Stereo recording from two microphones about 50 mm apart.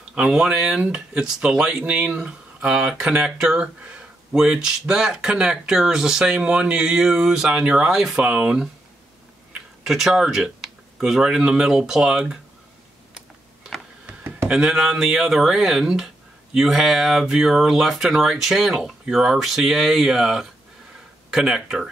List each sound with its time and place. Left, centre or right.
0.3 s speech: centre
9.8 s speech: centre
14.5 s speech: centre